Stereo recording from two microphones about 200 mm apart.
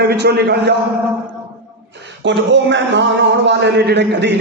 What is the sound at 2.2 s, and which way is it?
A man's voice, 65° right (ahead or behind).